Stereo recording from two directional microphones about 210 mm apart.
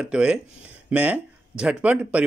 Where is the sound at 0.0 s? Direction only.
5° right (ahead or behind).